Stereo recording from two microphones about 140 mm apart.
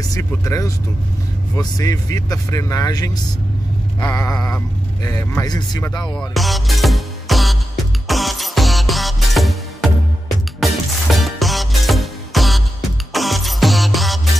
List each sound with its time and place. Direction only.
0.1 s speech: 20° left (ahead or behind)
6.1 s music: centre (ahead or behind)